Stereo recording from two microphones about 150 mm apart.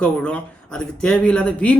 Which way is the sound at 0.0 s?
5° left (ahead or behind).